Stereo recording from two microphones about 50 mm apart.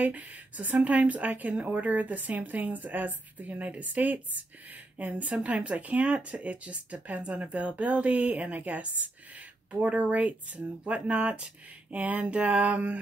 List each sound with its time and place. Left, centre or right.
0.0 s a woman's voice: right